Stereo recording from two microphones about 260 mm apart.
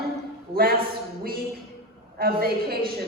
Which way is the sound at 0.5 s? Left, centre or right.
Right.